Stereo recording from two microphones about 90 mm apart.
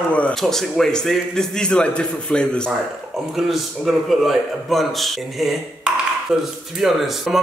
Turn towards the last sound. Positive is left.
turn(degrees=0)  # may be behind; listen again after turning